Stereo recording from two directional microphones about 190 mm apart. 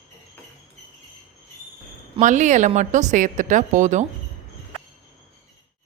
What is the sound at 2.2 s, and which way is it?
A woman's voice, 40° right (ahead or behind).